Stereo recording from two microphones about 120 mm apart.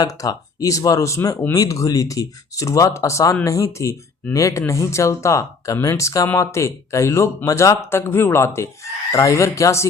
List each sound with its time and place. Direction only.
0.0 s speech: 30° left (ahead or behind)